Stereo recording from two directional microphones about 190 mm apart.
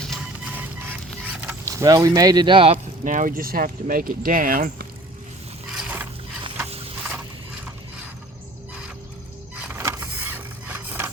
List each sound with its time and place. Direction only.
0.1 s music: 5° right (ahead or behind)
1.2 s speech: 10° right (ahead or behind); by 2.7 s 25° right (ahead or behind)
3.0 s speech: 45° right (ahead or behind)
5.7 s a sound: 10° right (ahead or behind)
9.6 s vehicle: 10° right (ahead or behind)